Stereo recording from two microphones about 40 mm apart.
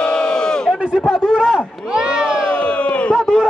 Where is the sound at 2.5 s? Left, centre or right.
Left.